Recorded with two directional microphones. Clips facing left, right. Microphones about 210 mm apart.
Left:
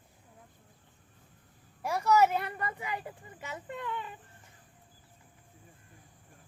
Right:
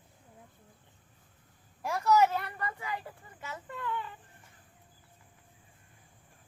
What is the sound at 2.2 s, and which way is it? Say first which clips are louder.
Speech: left 2 dB; 20° left (ahead or behind).